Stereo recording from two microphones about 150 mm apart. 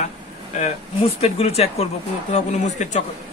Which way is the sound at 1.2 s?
40° left (ahead or behind).